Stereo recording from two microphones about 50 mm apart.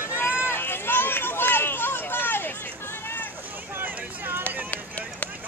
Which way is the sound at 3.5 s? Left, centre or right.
Right.